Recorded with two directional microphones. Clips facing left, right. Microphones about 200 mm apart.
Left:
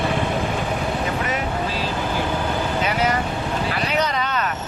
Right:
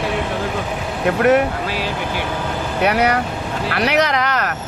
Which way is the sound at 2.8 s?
70° right (ahead or behind).